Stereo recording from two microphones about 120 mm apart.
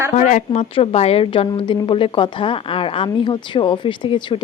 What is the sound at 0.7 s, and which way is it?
Speech, 55° left (ahead or behind).